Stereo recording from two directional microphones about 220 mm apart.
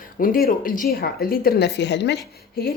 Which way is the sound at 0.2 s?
40° left (ahead or behind).